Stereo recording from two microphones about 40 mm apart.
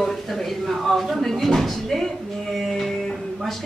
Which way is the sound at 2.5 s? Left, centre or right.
Centre.